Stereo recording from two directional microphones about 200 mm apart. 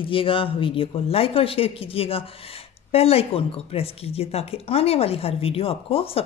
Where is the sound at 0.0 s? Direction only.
25° left (ahead or behind).